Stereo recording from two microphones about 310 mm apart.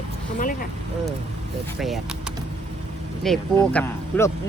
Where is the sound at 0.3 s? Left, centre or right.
Left.